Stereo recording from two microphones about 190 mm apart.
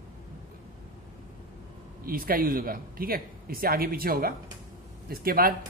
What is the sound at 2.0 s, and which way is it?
Speech, 50° right (ahead or behind).